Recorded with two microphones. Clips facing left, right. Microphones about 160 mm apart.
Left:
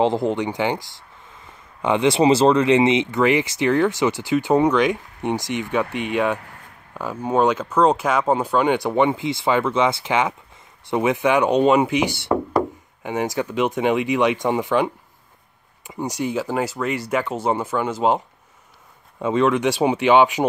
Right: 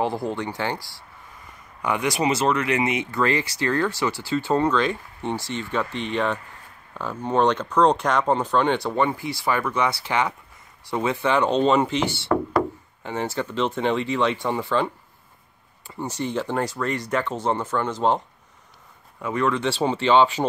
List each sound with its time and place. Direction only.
0.0 s speech: 20° left (ahead or behind)
15.9 s speech: 15° left (ahead or behind)
19.2 s speech: 20° left (ahead or behind)